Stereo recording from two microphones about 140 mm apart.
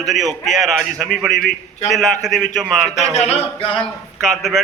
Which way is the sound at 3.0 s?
50° left (ahead or behind).